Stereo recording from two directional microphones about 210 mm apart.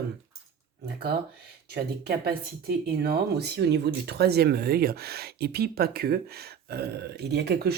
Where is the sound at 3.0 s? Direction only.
50° right (ahead or behind).